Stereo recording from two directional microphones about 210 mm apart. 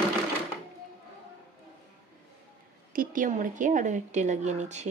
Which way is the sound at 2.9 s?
40° right (ahead or behind).